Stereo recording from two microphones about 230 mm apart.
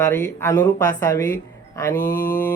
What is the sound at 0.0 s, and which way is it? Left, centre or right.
Speech, centre.